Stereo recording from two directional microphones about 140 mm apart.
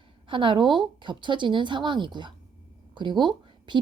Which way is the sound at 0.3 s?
35° right (ahead or behind).